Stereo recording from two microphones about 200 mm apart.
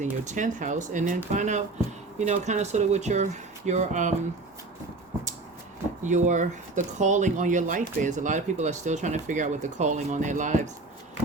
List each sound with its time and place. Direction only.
0.0 s speech: 40° right (ahead or behind)
6.0 s speech: 35° right (ahead or behind)